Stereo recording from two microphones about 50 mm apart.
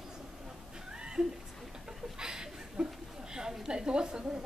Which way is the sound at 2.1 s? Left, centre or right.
Centre.